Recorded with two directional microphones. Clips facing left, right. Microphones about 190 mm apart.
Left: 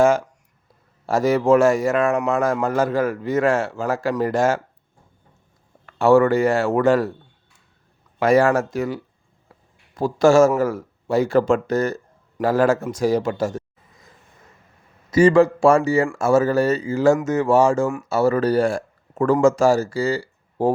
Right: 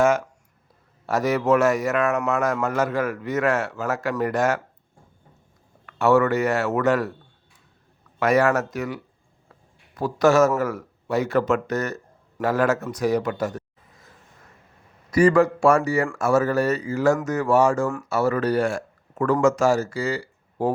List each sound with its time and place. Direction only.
0.0 s a sound: 30° left (ahead or behind)
1.0 s a man's voice: 30° left (ahead or behind)
5.8 s a man's voice: 30° left (ahead or behind)
8.2 s a man's voice: 30° left (ahead or behind)
15.1 s a man's voice: 25° left (ahead or behind)